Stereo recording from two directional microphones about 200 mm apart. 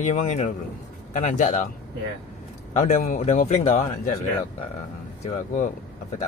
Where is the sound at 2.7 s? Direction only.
35° left (ahead or behind).